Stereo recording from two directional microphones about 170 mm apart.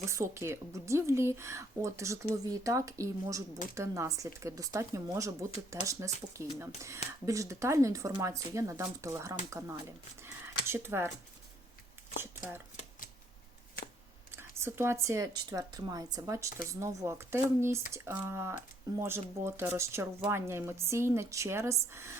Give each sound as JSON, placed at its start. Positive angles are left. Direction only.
{"t": 0.0, "sound": "speech", "side_deg": -15}
{"t": 10.2, "sound": "a sound", "side_deg": -15}
{"t": 12.2, "sound": "speech", "side_deg": -15}
{"t": 14.3, "sound": "speech", "side_deg": -15}